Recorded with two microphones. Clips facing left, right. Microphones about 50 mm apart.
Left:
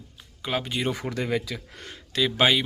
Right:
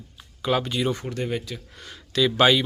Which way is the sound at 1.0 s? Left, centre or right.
Left.